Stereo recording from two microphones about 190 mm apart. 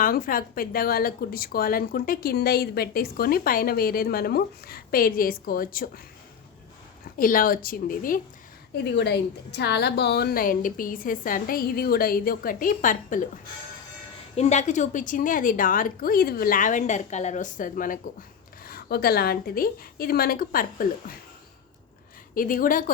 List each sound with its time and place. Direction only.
0.0 s speech: 45° left (ahead or behind)
7.2 s speech: 45° left (ahead or behind)
8.8 s speech: 60° left (ahead or behind); by 13.2 s 45° left (ahead or behind)
14.3 s speech: 35° left (ahead or behind)
22.4 s speech: 45° left (ahead or behind)